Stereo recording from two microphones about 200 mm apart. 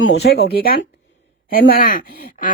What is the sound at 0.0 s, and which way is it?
Speech, 60° left (ahead or behind).